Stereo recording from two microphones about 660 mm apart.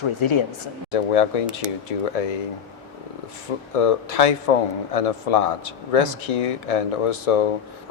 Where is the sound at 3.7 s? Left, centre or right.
Left.